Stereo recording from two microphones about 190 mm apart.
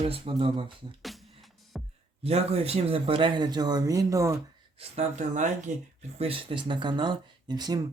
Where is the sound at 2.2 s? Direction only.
35° right (ahead or behind); by 4.4 s 15° right (ahead or behind).